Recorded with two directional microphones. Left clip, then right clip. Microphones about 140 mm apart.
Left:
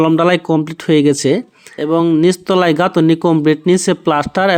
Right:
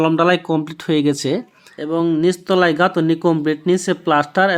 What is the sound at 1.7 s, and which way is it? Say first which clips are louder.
Speech: left 5 dB; 35° left (ahead or behind).